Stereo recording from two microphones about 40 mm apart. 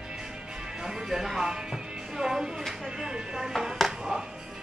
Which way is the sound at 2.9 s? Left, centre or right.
Right.